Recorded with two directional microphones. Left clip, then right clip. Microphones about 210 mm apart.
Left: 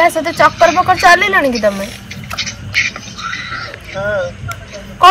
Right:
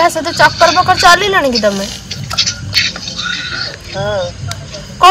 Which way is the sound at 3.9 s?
35° right (ahead or behind).